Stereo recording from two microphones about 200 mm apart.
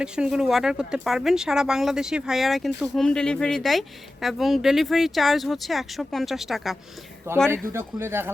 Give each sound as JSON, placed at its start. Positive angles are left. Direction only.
{"t": 0.0, "sound": "speech", "side_deg": -5}
{"t": 7.3, "sound": "speech", "side_deg": -10}